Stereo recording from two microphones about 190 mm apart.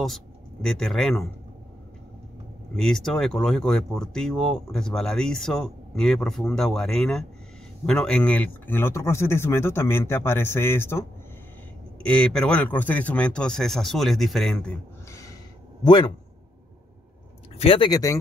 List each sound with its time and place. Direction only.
0.0 s speech: centre (ahead or behind)
2.7 s speech: centre (ahead or behind)
15.8 s speech: 20° left (ahead or behind)
17.6 s speech: 30° left (ahead or behind)